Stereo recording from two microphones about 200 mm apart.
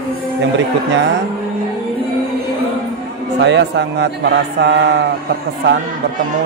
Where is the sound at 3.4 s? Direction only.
60° right (ahead or behind).